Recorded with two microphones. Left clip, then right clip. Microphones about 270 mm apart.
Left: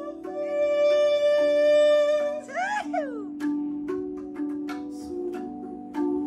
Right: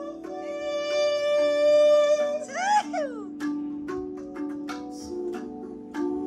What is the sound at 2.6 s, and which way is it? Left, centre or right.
Music, centre.